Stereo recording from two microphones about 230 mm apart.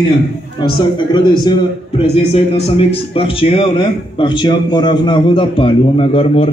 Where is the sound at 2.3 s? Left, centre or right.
Left.